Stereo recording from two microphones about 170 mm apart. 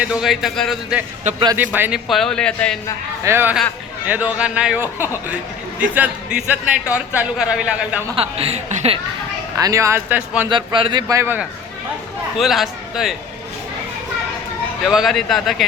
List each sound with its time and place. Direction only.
0.0 s a man's voice: 5° right (ahead or behind)
2.0 s speech: centre (ahead or behind)
3.2 s a man's voice: 15° right (ahead or behind)
8.1 s speech: 35° right (ahead or behind)
9.6 s a man's voice: 20° right (ahead or behind)
10.5 s speech: 30° right (ahead or behind)
11.1 s a man's voice: 15° right (ahead or behind)
12.4 s speech: centre (ahead or behind)
14.8 s speech: centre (ahead or behind)